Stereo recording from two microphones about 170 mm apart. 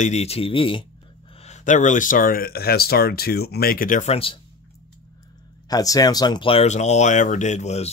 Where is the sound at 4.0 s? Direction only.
35° left (ahead or behind).